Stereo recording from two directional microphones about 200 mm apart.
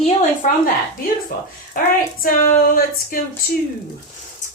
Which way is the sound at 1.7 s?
40° left (ahead or behind).